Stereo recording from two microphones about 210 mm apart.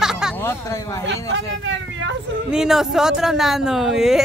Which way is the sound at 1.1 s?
60° right (ahead or behind).